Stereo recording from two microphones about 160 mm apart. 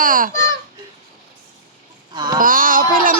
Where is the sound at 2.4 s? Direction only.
60° right (ahead or behind).